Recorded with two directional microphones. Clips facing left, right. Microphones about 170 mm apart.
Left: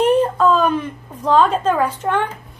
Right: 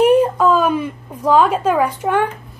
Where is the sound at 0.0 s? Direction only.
10° right (ahead or behind).